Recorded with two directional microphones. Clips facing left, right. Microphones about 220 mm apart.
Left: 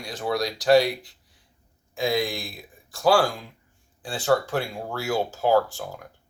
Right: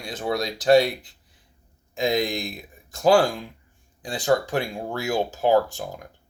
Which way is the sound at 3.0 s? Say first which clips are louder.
Right 2 dB; 20° right (ahead or behind).